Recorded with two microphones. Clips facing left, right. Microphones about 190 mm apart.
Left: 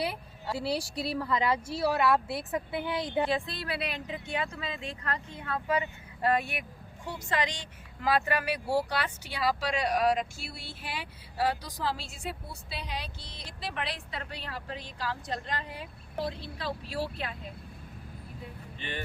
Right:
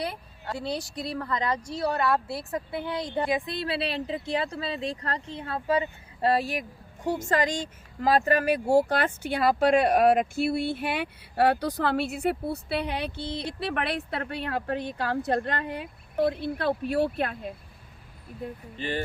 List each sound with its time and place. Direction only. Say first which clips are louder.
0.0 s speech: even; 5° left (ahead or behind)
3.2 s speech: right 3 dB; 15° right (ahead or behind); by 17.3 s 55° right (ahead or behind)
18.4 s speech: right 12 dB; 50° right (ahead or behind)
18.8 s speech: right 8 dB; 35° right (ahead or behind)